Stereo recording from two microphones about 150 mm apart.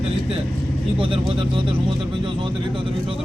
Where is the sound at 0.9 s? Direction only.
35° right (ahead or behind).